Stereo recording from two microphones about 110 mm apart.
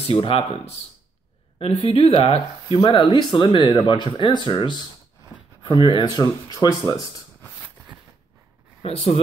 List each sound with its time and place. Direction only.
0.1 s speech: 60° left (ahead or behind)
2.7 s speech: 40° left (ahead or behind)
5.9 s speech: 40° left (ahead or behind)
8.8 s speech: 65° left (ahead or behind)